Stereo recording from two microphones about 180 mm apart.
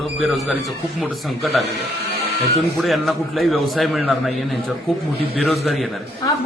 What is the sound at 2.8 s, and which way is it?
A man's voice, centre (ahead or behind).